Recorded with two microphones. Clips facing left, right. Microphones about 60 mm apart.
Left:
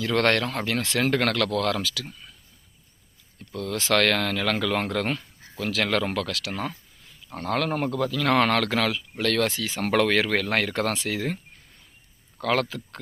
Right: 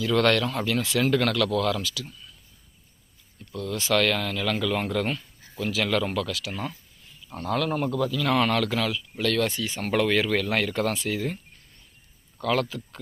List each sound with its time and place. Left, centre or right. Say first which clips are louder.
0.0 s speech: right 1 dB; left
0.8 s speech: even; left
3.3 s speech: left 1 dB; left
7.3 s speech: even; left
9.5 s speech: left 2 dB; left
12.4 s speech: left 1 dB; left